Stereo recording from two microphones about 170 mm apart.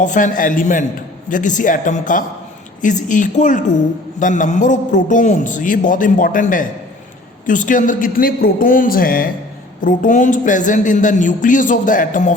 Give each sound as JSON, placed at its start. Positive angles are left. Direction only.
{"t": 0.0, "sound": "a woman's voice", "side_deg": 50}